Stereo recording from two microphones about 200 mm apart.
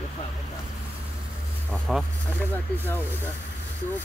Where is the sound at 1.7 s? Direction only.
Centre (ahead or behind).